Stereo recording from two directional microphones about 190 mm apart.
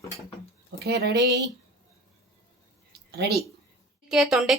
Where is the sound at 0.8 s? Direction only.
60° right (ahead or behind).